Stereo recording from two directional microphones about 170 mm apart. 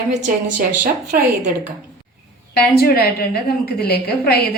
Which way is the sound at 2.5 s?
65° left (ahead or behind).